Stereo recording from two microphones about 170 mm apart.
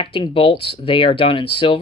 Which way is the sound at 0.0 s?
30° left (ahead or behind).